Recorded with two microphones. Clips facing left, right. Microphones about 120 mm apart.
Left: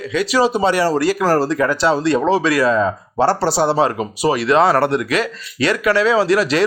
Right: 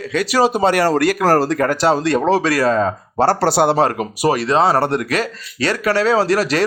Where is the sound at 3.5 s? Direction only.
55° right (ahead or behind).